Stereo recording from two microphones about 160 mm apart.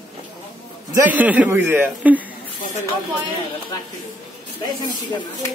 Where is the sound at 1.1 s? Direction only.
10° right (ahead or behind).